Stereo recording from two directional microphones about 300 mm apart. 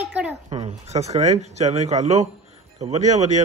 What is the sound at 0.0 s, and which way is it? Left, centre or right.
Speech, centre.